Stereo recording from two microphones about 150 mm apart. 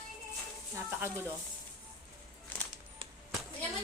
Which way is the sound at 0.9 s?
15° right (ahead or behind).